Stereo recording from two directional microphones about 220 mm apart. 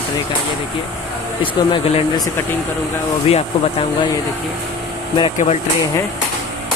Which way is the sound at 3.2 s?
25° left (ahead or behind).